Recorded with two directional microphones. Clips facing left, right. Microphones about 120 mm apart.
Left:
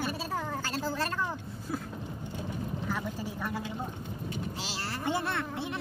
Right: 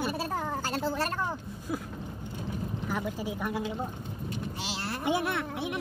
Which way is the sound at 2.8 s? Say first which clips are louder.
Right 4 dB; 15° right (ahead or behind).